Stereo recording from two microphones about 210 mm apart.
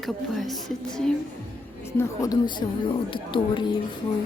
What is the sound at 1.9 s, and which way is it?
A woman's voice, 15° left (ahead or behind).